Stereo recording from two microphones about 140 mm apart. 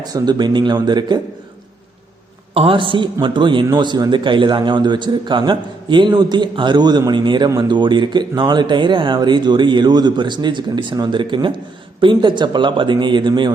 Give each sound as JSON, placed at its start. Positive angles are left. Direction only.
{"t": 0.0, "sound": "a man's voice", "side_deg": -30}
{"t": 2.6, "sound": "a man's voice", "side_deg": -35}